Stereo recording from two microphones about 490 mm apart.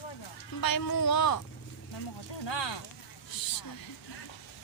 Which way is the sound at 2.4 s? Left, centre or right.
Left.